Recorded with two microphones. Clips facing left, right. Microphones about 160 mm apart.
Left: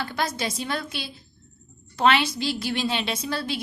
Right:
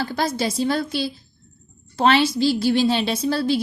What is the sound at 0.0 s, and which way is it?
A woman's voice, 35° right (ahead or behind).